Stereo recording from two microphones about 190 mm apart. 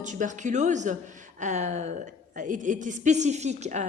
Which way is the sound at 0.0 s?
40° right (ahead or behind).